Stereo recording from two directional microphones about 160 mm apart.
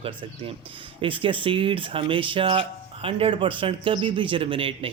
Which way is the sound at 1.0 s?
35° right (ahead or behind).